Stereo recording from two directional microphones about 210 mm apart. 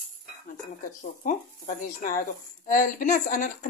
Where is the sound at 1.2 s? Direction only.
40° left (ahead or behind).